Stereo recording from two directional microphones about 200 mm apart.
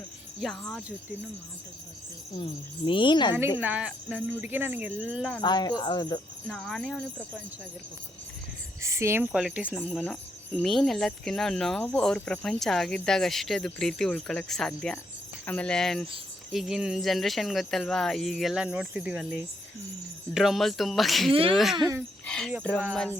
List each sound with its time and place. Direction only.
0.4 s speech: centre (ahead or behind)
2.3 s speech: 25° left (ahead or behind)
3.6 s speech: 5° right (ahead or behind)
5.4 s speech: 20° left (ahead or behind)
6.5 s speech: 5° left (ahead or behind)
8.8 s speech: 15° right (ahead or behind)
22.3 s a sound: 5° left (ahead or behind)